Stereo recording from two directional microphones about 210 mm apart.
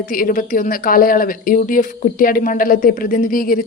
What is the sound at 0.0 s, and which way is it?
A woman's voice, 40° left (ahead or behind).